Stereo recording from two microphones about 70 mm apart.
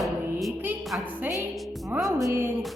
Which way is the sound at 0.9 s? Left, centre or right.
Right.